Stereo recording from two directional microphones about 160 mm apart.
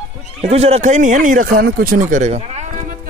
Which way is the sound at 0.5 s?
40° right (ahead or behind).